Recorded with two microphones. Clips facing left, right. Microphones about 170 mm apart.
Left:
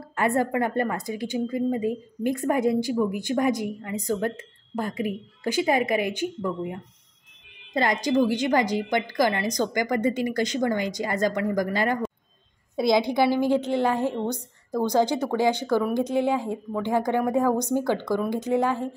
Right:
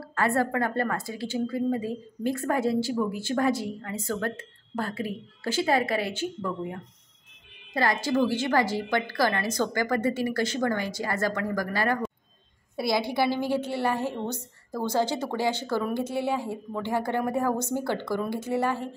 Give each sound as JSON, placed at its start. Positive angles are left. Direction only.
{"t": 0.0, "sound": "a woman's voice", "side_deg": 20}